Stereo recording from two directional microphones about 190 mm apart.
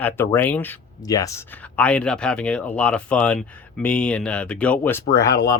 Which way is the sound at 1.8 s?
5° left (ahead or behind).